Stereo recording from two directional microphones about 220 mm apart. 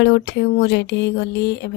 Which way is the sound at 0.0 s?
50° left (ahead or behind).